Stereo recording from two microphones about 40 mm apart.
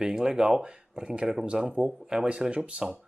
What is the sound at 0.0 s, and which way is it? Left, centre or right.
Speech, centre.